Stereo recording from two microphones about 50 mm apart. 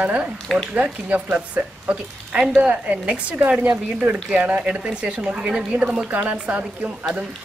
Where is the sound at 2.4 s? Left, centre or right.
Centre.